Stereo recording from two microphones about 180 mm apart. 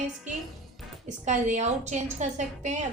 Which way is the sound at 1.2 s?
40° right (ahead or behind).